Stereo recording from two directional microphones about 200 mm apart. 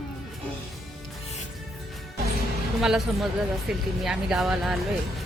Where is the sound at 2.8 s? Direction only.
Centre (ahead or behind).